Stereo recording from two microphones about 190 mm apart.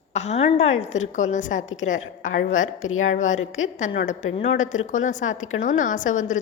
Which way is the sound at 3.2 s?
40° left (ahead or behind).